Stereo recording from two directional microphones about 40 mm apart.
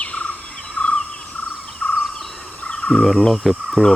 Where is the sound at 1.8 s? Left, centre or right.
Left.